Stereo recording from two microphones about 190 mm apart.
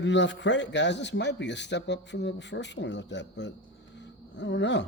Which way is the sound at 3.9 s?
70° left (ahead or behind).